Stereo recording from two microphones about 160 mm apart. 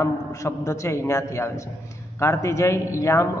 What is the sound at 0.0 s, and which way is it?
A man's voice, 20° left (ahead or behind).